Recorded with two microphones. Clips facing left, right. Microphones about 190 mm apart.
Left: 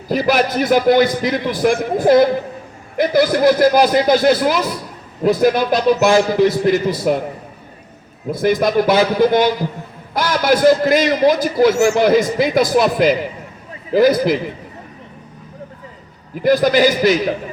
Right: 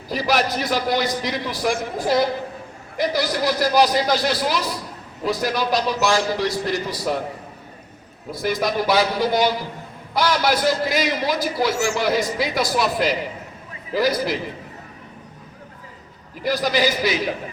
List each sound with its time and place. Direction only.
0.1 s a man's voice: 50° left (ahead or behind)
8.3 s a man's voice: 50° left (ahead or behind)
16.4 s a man's voice: 50° left (ahead or behind)